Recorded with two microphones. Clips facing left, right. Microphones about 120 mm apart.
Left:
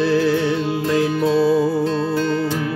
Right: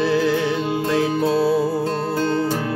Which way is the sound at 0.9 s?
Centre (ahead or behind).